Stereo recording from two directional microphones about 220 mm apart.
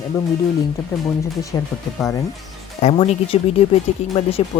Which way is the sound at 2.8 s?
30° left (ahead or behind).